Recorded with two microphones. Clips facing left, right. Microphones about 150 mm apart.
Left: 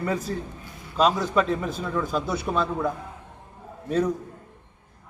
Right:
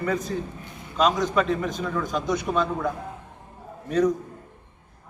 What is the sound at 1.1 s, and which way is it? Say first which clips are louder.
A man's voice: even; 5° left (ahead or behind).